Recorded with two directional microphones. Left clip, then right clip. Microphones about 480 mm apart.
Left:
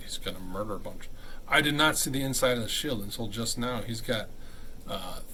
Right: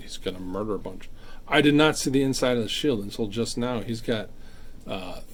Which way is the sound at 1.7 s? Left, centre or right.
Centre.